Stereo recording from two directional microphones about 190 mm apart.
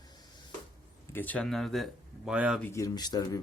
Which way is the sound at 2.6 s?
15° left (ahead or behind).